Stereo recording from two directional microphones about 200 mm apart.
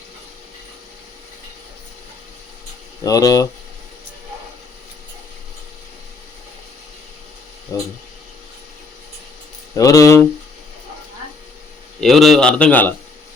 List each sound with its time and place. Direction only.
3.0 s speech: 15° left (ahead or behind)
7.7 s a sound: 15° left (ahead or behind)
9.7 s speech: 15° left (ahead or behind)
11.9 s a man's voice: centre (ahead or behind)